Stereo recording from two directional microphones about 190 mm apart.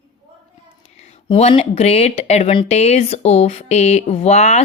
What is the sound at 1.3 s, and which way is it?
A woman's voice, 30° left (ahead or behind).